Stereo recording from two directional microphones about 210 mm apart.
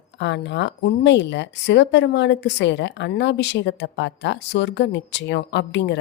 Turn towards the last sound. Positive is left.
turn(degrees=55)  # may be behind; listen again after turning